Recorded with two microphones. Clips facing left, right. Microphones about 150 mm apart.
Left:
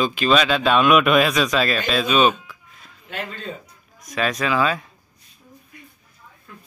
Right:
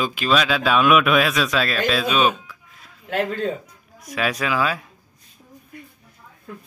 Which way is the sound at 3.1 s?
75° right (ahead or behind).